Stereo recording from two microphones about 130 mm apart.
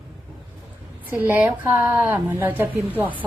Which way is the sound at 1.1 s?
15° right (ahead or behind).